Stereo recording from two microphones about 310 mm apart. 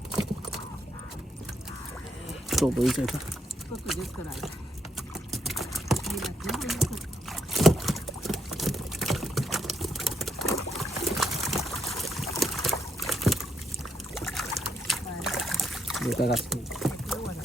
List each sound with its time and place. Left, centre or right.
2.5 s speech: centre
4.9 s typing: centre
10.5 s a sound: centre
14.2 s boat: centre
14.6 s splash: centre
16.3 s rowboat: centre